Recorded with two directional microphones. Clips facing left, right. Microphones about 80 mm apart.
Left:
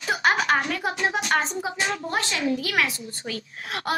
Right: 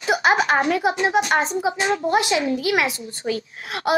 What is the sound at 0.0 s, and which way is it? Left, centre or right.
A woman's voice, centre.